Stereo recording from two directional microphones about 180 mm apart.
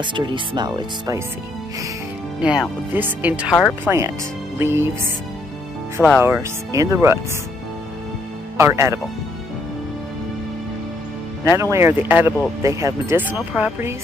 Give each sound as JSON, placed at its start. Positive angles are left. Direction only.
{"t": 0.0, "sound": "speech", "side_deg": -25}
{"t": 2.4, "sound": "speech", "side_deg": -5}
{"t": 5.9, "sound": "speech", "side_deg": 5}
{"t": 6.2, "sound": "speech", "side_deg": -15}
{"t": 8.5, "sound": "speech", "side_deg": -15}
{"t": 11.4, "sound": "speech", "side_deg": -15}